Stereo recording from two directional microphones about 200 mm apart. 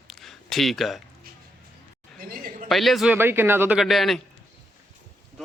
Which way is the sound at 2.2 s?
45° right (ahead or behind).